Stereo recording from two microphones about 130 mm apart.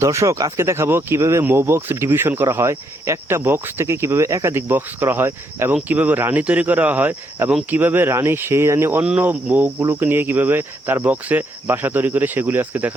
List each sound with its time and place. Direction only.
0.0 s speech: 25° right (ahead or behind)